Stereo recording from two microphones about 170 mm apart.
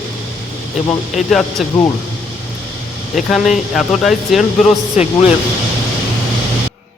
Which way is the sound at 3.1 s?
Centre (ahead or behind).